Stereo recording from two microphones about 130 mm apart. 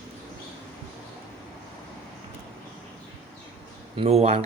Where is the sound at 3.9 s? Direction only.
50° right (ahead or behind).